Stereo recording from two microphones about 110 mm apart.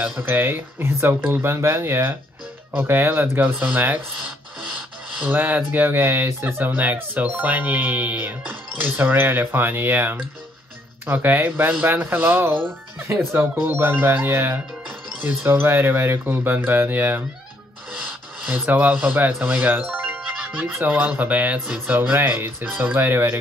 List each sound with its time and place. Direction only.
0.2 s speech: 20° right (ahead or behind)
5.2 s speech: 15° right (ahead or behind)
18.7 s speech: 15° right (ahead or behind)